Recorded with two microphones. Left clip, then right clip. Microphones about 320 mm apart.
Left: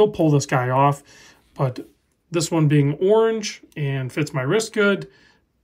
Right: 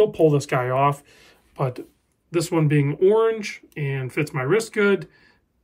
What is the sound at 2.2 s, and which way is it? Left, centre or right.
Speech, centre.